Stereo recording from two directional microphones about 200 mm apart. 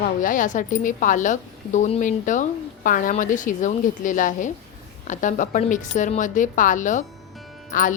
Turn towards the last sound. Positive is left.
turn(degrees=40)  # may be behind; listen again after turning